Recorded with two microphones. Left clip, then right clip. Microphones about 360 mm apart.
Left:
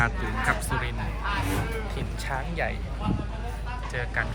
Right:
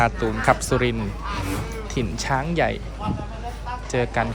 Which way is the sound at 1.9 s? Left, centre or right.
Centre.